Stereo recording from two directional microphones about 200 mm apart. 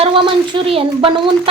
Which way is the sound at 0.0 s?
25° right (ahead or behind).